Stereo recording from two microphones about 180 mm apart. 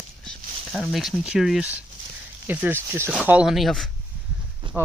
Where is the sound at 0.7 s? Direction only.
Centre (ahead or behind).